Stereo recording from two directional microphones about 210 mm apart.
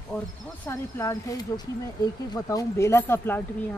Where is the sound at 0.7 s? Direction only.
15° left (ahead or behind).